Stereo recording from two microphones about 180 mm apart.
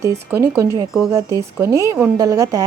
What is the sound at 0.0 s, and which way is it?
A woman's voice, 15° right (ahead or behind).